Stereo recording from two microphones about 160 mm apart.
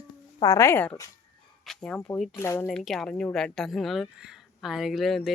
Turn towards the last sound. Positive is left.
turn(degrees=0)  # may be behind; listen again after turning